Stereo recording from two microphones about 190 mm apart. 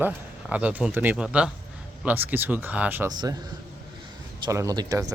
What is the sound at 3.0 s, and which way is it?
Speech, 20° right (ahead or behind).